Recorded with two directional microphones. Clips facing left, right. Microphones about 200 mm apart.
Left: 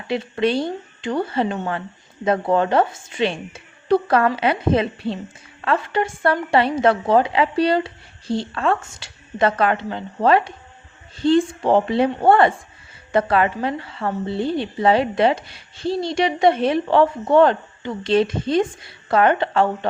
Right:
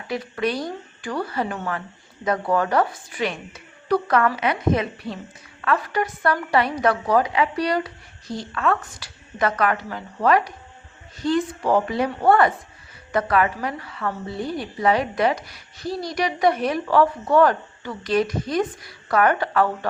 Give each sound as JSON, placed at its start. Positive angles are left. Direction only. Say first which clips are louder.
{"t": 0.1, "sound": "a woman's voice", "louder": "left 5 dB", "side_deg": 25}